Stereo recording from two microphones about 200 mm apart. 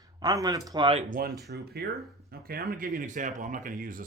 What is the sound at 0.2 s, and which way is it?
Speech, 20° right (ahead or behind).